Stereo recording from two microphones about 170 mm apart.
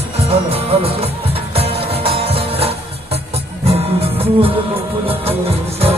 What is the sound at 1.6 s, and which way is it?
Music, 35° right (ahead or behind).